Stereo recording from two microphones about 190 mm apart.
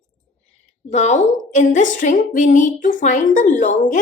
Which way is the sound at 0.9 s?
35° left (ahead or behind).